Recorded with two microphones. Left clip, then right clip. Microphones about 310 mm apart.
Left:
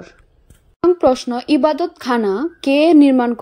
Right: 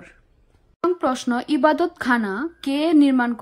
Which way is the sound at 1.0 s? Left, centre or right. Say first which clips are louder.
Left 7 dB; centre.